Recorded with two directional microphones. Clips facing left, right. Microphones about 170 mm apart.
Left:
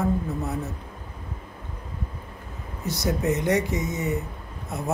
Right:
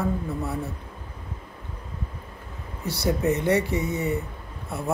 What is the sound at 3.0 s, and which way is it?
Speech, 15° left (ahead or behind).